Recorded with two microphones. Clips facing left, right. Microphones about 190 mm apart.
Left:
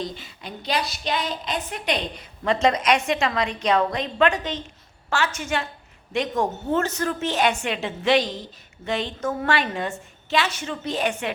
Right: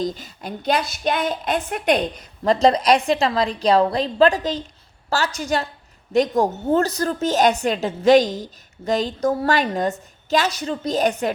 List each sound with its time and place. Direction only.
0.0 s a woman's voice: 40° right (ahead or behind)
2.4 s a woman's voice: 35° right (ahead or behind)